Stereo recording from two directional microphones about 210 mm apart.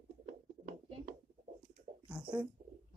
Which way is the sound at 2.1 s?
5° right (ahead or behind).